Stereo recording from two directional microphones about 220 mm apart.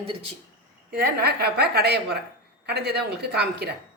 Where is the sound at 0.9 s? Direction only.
45° right (ahead or behind).